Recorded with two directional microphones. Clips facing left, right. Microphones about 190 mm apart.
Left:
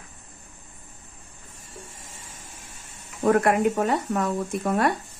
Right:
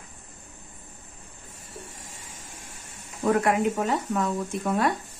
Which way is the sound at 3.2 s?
60° left (ahead or behind).